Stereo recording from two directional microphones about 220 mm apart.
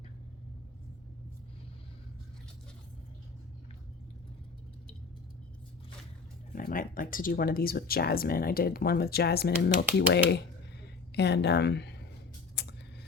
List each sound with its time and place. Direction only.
6.5 s speech: 40° left (ahead or behind)
12.6 s tick: 50° left (ahead or behind)